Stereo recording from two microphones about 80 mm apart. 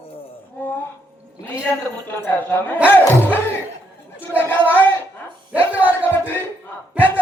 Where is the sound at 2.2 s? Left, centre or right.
Left.